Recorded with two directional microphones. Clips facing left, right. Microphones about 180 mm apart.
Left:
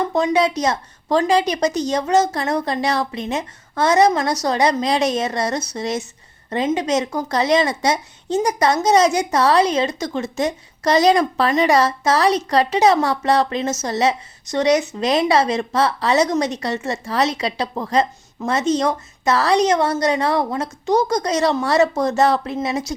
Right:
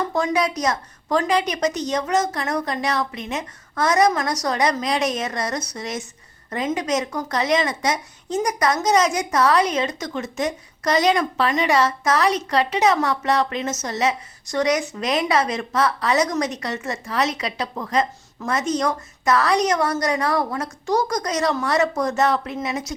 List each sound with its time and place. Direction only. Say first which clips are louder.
0.0 s a woman's voice: left 4 dB; 20° left (ahead or behind)